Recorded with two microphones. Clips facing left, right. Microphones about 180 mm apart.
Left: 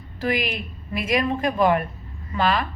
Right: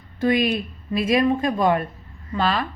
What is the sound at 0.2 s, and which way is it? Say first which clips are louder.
A woman's voice: right 5 dB; 25° right (ahead or behind).